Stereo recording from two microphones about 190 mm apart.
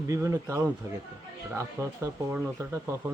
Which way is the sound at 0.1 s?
15° right (ahead or behind).